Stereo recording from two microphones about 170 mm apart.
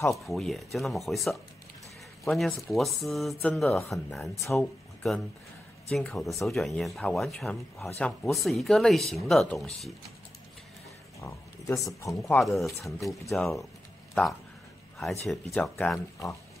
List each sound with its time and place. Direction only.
0.1 s speech: centre (ahead or behind)
4.2 s speech: 15° left (ahead or behind)
4.6 s speech: centre (ahead or behind)
11.1 s speech: 20° left (ahead or behind)
12.4 s speech: centre (ahead or behind)
15.0 s speech: centre (ahead or behind)